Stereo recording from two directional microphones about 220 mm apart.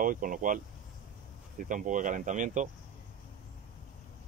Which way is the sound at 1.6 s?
35° right (ahead or behind).